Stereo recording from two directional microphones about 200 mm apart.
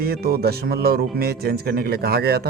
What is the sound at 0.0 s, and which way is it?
Speech, 50° right (ahead or behind).